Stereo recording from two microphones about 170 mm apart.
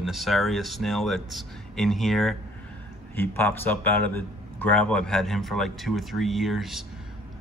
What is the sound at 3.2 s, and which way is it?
A man's voice, 10° left (ahead or behind).